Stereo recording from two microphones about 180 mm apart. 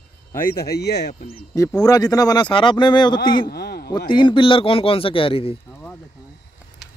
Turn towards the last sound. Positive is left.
turn(degrees=10)  # may be behind; listen again after turning